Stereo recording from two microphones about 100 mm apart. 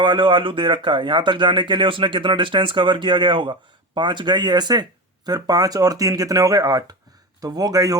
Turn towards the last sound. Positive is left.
turn(degrees=-40)  # may be behind; listen again after turning